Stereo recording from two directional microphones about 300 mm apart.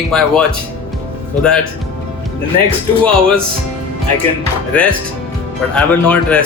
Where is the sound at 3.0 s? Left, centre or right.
Centre.